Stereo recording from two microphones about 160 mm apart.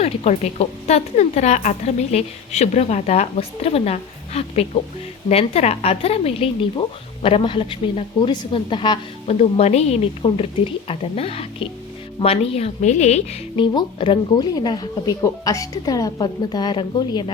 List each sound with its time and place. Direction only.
0.0 s a woman's voice: 40° left (ahead or behind)
9.2 s a woman's voice: 45° left (ahead or behind)
13.7 s speech: 30° left (ahead or behind)